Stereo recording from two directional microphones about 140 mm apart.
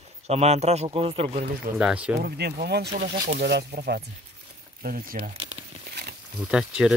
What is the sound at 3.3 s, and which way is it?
Speech, 90° right.